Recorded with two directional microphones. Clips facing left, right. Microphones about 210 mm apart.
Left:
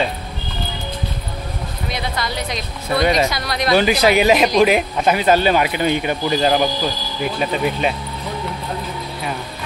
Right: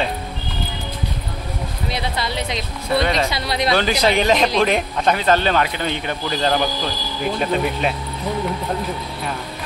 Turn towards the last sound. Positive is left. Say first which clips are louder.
# left 1 dB
turn(degrees=0)  # may be behind; listen again after turning